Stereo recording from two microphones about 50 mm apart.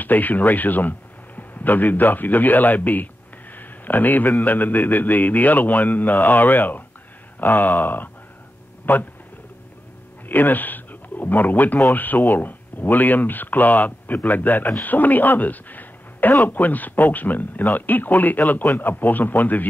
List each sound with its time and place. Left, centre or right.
0.0 s speech: left
10.2 s speech: left